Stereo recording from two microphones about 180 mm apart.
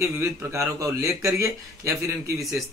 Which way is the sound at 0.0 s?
15° right (ahead or behind).